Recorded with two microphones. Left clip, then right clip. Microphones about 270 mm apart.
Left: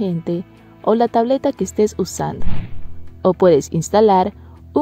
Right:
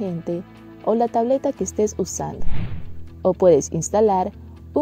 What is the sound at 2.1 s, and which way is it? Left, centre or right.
A woman's voice, centre.